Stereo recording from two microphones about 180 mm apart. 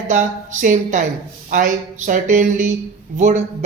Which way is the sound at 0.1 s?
45° right (ahead or behind).